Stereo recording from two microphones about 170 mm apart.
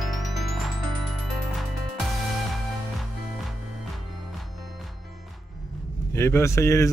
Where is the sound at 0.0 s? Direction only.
Centre (ahead or behind).